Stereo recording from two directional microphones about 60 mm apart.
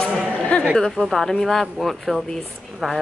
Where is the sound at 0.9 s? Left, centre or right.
Centre.